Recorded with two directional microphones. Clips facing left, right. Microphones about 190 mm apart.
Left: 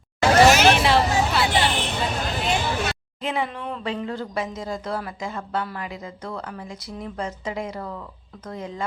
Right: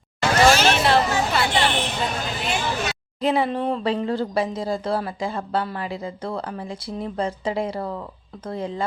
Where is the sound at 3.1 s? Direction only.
35° right (ahead or behind).